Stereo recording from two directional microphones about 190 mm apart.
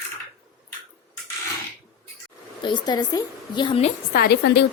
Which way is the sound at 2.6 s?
20° left (ahead or behind).